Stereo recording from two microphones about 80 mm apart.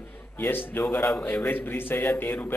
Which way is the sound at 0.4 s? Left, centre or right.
Left.